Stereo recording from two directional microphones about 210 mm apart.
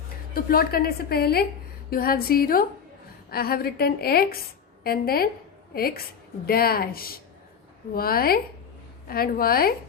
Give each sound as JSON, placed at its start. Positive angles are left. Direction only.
{"t": 0.3, "sound": "a woman's voice", "side_deg": 45}